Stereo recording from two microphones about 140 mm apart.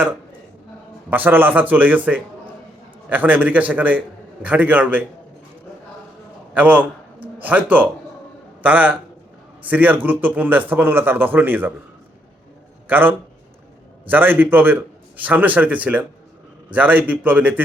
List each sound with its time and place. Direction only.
1.1 s a man's voice: 15° right (ahead or behind)
6.5 s a man's voice: 10° right (ahead or behind)
12.9 s a man's voice: 15° right (ahead or behind)